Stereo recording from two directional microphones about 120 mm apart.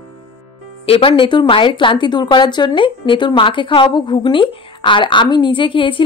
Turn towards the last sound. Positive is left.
turn(degrees=45)  # may be behind; listen again after turning